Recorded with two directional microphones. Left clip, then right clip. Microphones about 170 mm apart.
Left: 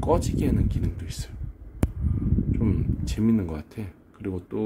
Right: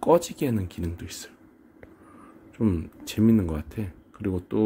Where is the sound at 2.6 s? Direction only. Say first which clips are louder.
Right 1 dB; 15° right (ahead or behind).